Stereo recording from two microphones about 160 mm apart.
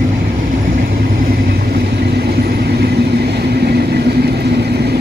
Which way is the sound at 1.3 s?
70° right (ahead or behind).